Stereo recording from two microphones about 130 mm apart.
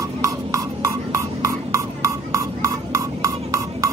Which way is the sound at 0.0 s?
25° right (ahead or behind).